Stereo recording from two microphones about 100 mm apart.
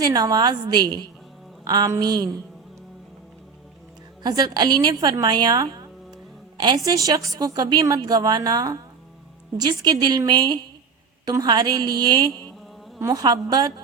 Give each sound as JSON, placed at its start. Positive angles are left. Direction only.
{"t": 0.0, "sound": "a woman's voice", "side_deg": -40}
{"t": 4.2, "sound": "a woman's voice", "side_deg": -45}